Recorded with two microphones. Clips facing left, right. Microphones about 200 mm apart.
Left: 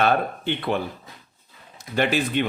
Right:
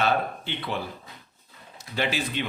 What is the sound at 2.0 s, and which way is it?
Speech, 55° left (ahead or behind).